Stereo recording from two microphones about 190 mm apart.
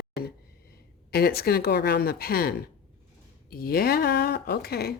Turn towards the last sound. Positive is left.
turn(degrees=55)  # may be behind; listen again after turning